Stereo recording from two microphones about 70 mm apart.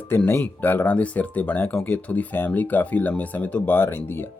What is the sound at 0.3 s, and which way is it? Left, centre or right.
Speech, left.